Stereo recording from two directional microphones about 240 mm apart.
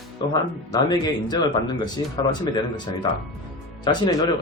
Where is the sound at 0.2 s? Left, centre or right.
Centre.